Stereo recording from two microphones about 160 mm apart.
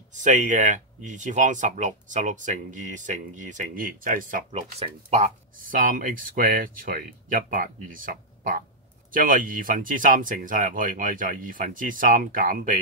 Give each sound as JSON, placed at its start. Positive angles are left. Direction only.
{"t": 0.1, "sound": "speech", "side_deg": -50}
{"t": 4.7, "sound": "speech", "side_deg": -40}